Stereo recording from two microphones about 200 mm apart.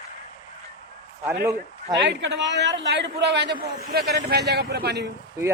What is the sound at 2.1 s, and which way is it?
A man's voice, 60° right (ahead or behind).